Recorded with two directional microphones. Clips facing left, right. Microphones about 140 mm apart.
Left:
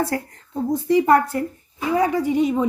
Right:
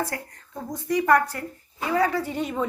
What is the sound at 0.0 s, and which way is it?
A woman's voice, 25° left (ahead or behind).